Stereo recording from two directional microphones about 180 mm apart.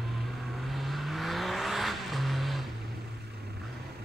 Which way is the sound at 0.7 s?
Centre (ahead or behind).